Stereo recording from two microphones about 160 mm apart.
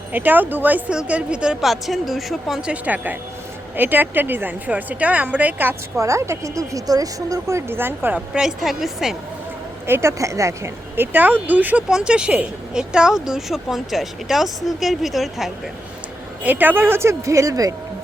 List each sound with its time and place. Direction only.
0.1 s a woman's voice: 10° right (ahead or behind)
9.8 s a woman's voice: 15° right (ahead or behind)